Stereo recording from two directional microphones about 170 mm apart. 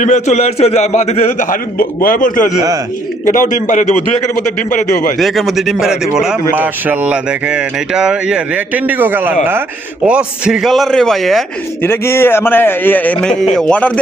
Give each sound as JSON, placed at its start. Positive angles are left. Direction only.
{"t": 0.0, "sound": "a man's voice", "side_deg": 45}
{"t": 5.2, "sound": "a man's voice", "side_deg": 0}
{"t": 11.8, "sound": "a man's voice", "side_deg": 15}